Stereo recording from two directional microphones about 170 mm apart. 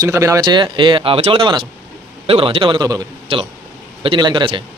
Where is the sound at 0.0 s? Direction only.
20° right (ahead or behind).